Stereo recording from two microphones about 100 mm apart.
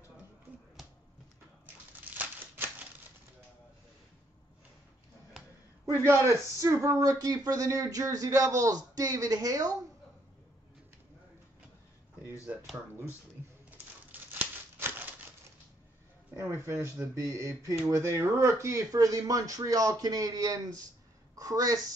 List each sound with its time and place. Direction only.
2.0 s crumpling: 20° right (ahead or behind)
5.9 s speech: 25° right (ahead or behind)
14.3 s a sound: 20° right (ahead or behind)
16.3 s speech: 25° right (ahead or behind)